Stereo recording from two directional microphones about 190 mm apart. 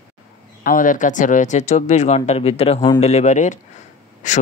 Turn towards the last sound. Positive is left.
turn(degrees=40)  # may be behind; listen again after turning